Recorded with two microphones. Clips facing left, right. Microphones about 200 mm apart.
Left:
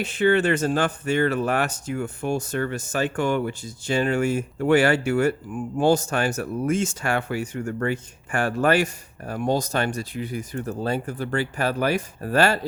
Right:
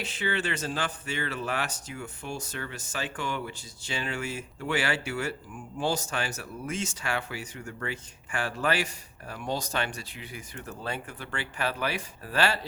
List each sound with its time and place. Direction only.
0.0 s speech: 50° left (ahead or behind)